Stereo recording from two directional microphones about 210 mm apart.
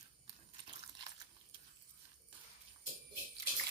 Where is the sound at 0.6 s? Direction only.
25° right (ahead or behind).